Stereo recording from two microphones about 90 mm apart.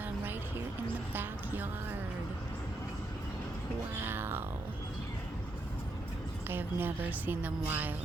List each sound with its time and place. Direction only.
1.1 s music: 20° right (ahead or behind)
3.9 s music: 25° right (ahead or behind)
6.5 s a woman's voice: 20° right (ahead or behind)